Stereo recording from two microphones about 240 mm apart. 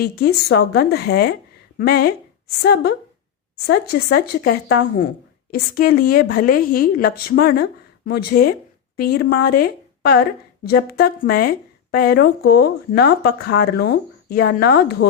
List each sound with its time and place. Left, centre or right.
0.0 s a woman's voice: left